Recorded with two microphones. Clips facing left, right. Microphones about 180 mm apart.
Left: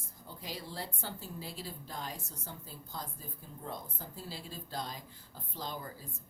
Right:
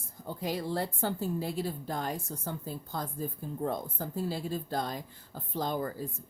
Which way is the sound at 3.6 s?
55° right (ahead or behind).